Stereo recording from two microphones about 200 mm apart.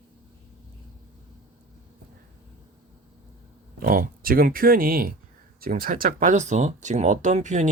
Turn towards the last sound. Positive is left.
turn(degrees=-35)  # may be behind; listen again after turning